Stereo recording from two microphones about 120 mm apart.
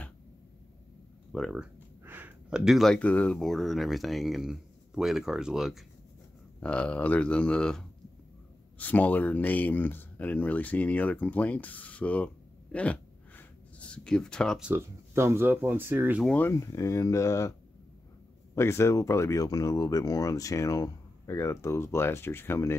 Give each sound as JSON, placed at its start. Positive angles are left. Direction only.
{"t": 1.3, "sound": "speech", "side_deg": 0}
{"t": 2.0, "sound": "a sound", "side_deg": -15}
{"t": 3.0, "sound": "speech", "side_deg": 10}
{"t": 6.6, "sound": "speech", "side_deg": 10}
{"t": 12.7, "sound": "a sound", "side_deg": 10}
{"t": 14.8, "sound": "speech", "side_deg": -20}
{"t": 16.3, "sound": "speech", "side_deg": 15}
{"t": 16.5, "sound": "speech", "side_deg": 25}